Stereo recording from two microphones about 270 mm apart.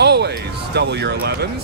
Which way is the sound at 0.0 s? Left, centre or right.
Right.